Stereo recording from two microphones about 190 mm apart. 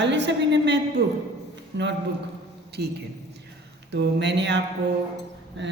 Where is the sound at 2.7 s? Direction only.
60° right (ahead or behind).